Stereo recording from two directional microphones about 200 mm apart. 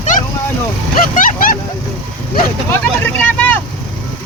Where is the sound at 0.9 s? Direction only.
45° left (ahead or behind).